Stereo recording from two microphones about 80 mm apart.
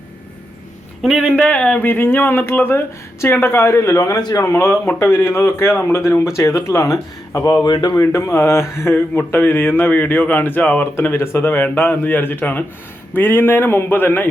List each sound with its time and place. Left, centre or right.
1.0 s speech: centre
1.4 s speech: centre
1.8 s speech: left
4.2 s speech: left
4.4 s speech: left
7.6 s speech: left
7.9 s speech: left